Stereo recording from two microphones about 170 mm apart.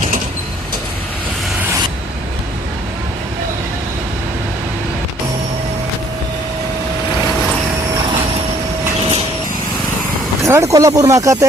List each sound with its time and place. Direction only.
10.4 s speech: 15° right (ahead or behind)